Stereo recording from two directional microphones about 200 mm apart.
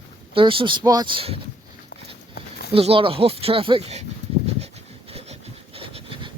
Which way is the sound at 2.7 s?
30° right (ahead or behind).